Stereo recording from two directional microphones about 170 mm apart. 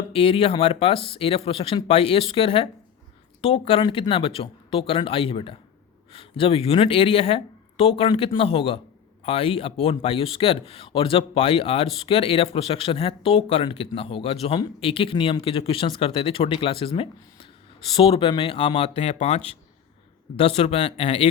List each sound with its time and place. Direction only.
0.1 s speech: 35° left (ahead or behind)